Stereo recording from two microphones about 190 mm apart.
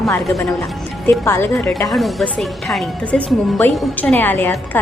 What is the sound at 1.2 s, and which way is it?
A woman's voice, 15° left (ahead or behind).